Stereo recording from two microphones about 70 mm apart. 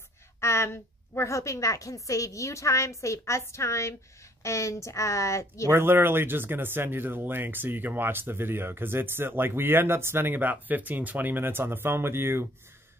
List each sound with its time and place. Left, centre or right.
0.4 s a woman's voice: left
5.7 s speech: right